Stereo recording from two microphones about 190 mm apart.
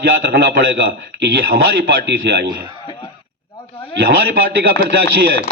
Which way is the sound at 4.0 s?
55° right (ahead or behind).